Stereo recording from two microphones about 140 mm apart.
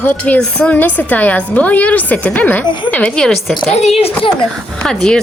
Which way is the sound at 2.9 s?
10° left (ahead or behind).